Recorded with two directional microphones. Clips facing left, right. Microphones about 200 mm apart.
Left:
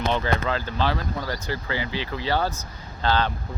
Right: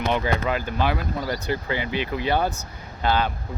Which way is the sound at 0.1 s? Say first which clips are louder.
Right 1 dB; 15° right (ahead or behind).